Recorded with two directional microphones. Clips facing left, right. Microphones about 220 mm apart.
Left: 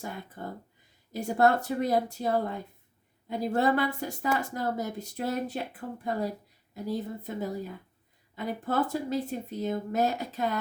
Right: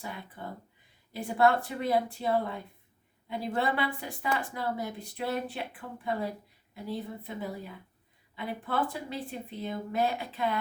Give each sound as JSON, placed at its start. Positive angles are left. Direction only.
{"t": 0.0, "sound": "a woman's voice", "side_deg": 45}